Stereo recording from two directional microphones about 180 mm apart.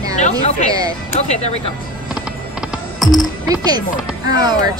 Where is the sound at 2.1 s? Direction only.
5° right (ahead or behind).